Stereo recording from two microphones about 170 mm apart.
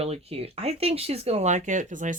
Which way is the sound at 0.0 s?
35° right (ahead or behind).